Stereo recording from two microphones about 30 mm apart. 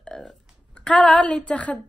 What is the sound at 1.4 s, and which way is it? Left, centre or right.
Speech, left.